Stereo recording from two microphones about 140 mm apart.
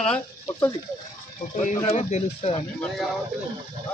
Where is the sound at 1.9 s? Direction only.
55° left (ahead or behind).